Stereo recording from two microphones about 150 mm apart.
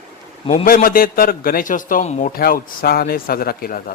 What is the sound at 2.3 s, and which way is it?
A man's voice, 75° left (ahead or behind).